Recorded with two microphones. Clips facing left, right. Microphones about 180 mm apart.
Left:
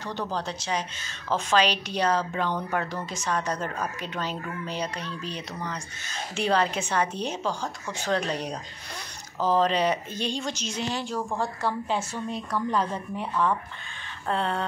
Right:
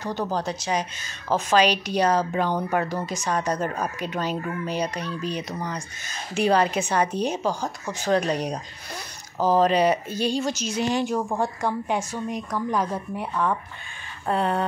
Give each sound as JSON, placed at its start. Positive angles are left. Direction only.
{"t": 0.0, "sound": "speech", "side_deg": -45}
{"t": 0.5, "sound": "a woman's voice", "side_deg": -10}
{"t": 9.4, "sound": "a woman's voice", "side_deg": -10}